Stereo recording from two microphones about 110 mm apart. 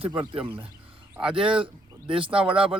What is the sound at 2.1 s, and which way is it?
Speech, 50° right (ahead or behind).